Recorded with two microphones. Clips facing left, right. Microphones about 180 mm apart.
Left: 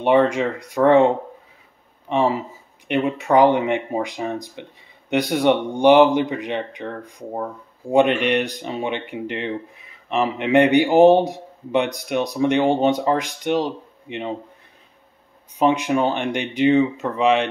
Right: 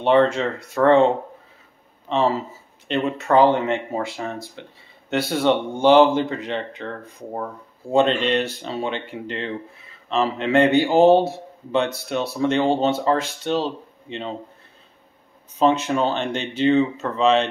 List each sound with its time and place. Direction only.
0.0 s speech: 15° left (ahead or behind)
15.6 s speech: 15° left (ahead or behind)